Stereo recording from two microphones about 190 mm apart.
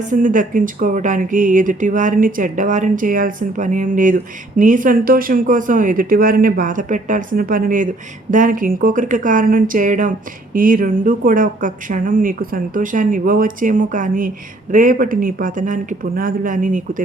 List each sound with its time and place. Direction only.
0.0 s speech: 45° right (ahead or behind)